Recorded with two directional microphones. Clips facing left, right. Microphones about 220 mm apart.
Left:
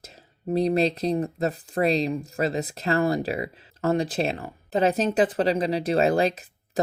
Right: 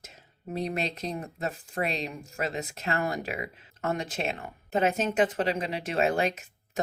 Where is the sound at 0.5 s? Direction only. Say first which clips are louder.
Left 9 dB; 35° left (ahead or behind).